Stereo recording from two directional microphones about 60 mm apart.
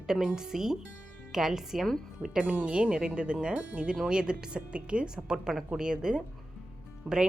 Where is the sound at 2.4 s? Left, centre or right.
Right.